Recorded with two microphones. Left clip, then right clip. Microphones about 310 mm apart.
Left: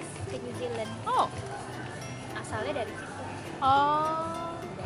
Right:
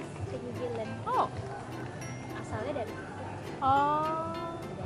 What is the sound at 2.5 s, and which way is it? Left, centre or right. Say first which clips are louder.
Speech: left 3 dB; centre.